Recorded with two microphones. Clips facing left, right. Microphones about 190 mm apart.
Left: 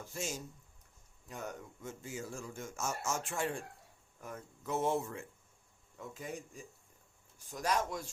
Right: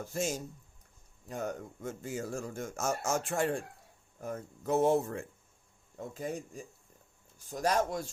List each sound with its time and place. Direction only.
0.0 s speech: 40° right (ahead or behind)
1.8 s speech: 50° right (ahead or behind)
2.5 s speech: 55° right (ahead or behind)
2.7 s speech: 40° right (ahead or behind)
7.5 s speech: 35° right (ahead or behind)